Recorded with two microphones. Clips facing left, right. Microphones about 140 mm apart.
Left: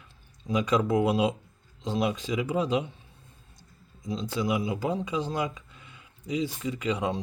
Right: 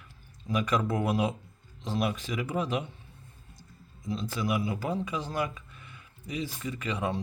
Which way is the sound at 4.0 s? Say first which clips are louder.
Left 2 dB; 15° left (ahead or behind).